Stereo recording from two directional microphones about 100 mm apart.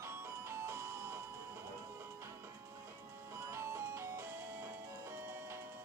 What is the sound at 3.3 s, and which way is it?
Music, 25° right (ahead or behind).